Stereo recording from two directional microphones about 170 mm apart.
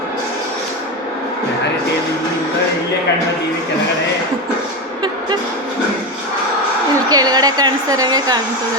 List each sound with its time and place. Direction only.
6.9 s a woman's voice: 20° right (ahead or behind)